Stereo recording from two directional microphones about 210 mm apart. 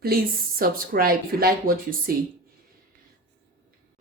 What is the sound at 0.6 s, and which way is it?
Speech, 45° right (ahead or behind).